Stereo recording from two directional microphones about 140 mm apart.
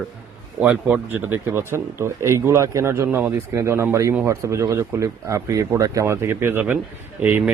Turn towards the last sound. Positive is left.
turn(degrees=-15)  # may be behind; listen again after turning